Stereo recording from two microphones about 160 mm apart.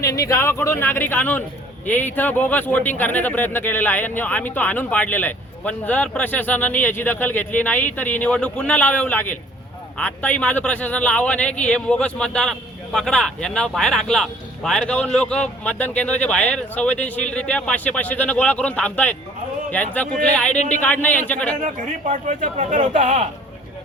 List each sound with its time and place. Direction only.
0.0 s a man's voice: 20° left (ahead or behind)
21.6 s speech: 50° right (ahead or behind)